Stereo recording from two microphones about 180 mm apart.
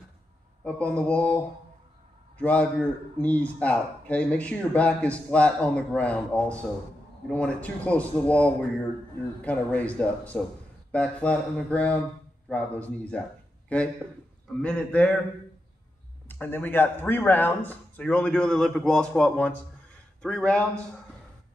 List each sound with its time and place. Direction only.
0.7 s speech: 5° left (ahead or behind)
2.3 s a man's voice: 5° left (ahead or behind)
16.3 s a man's voice: 10° left (ahead or behind)